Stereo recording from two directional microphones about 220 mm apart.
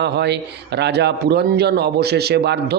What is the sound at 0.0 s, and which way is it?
A man's voice, 50° right (ahead or behind).